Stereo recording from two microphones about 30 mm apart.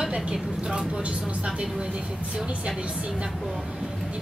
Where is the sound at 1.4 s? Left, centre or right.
Right.